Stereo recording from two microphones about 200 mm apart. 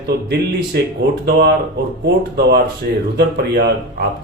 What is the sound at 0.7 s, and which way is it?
Speech, 55° right (ahead or behind).